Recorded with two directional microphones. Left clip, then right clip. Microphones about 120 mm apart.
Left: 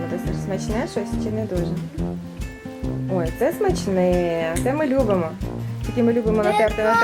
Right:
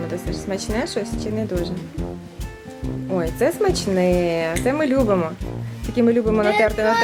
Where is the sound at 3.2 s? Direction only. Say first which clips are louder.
Right 2 dB; 25° right (ahead or behind).